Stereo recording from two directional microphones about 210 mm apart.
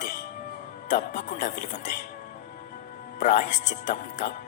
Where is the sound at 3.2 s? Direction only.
35° left (ahead or behind).